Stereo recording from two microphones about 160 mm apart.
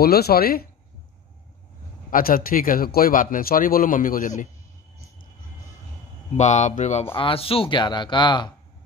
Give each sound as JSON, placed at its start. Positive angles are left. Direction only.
{"t": 0.0, "sound": "speech", "side_deg": 75}
{"t": 2.0, "sound": "speech", "side_deg": 60}
{"t": 6.3, "sound": "speech", "side_deg": 45}
{"t": 7.2, "sound": "speech", "side_deg": 35}